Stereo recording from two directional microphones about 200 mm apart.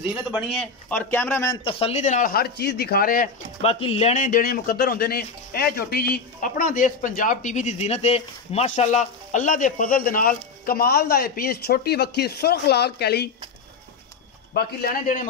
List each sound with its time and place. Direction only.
0.5 s speech: 5° left (ahead or behind); by 3.3 s 45° left (ahead or behind)
3.6 s speech: 30° left (ahead or behind); by 13.3 s 55° left (ahead or behind)
14.5 s speech: 55° left (ahead or behind)